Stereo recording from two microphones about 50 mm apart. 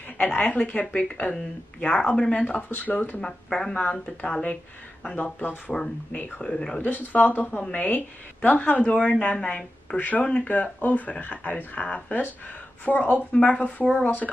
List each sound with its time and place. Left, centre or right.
0.2 s speech: left
2.4 s speech: left
3.4 s speech: centre
3.8 s speech: left
5.1 s speech: left
5.7 s speech: centre
6.8 s speech: left